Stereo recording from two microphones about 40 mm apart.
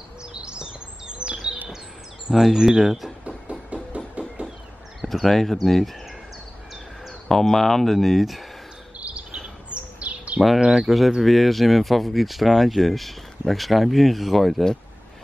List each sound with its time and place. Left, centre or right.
0.2 s bird: right
2.5 s speech: centre
3.3 s a sound: right
5.0 s speech: centre
7.2 s speech: centre
9.0 s cricket: right
9.9 s bird: right
10.6 s speech: centre
11.1 s speech: centre